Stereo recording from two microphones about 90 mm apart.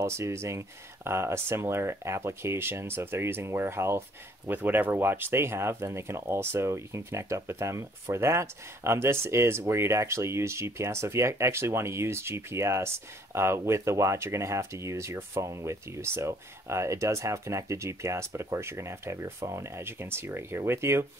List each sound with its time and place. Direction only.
0.0 s speech: 30° right (ahead or behind)